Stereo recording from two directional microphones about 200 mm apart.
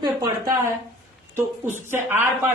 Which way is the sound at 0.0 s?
15° right (ahead or behind).